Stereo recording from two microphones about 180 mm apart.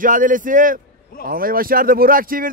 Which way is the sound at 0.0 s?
45° right (ahead or behind).